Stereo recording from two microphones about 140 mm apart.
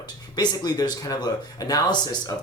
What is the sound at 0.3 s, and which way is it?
Speech, 30° left (ahead or behind).